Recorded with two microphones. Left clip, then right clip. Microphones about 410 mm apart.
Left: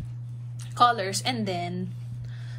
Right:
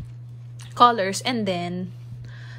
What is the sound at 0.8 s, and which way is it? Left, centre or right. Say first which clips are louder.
Speech: right 5 dB; centre.